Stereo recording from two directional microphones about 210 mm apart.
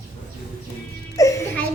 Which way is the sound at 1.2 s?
15° left (ahead or behind).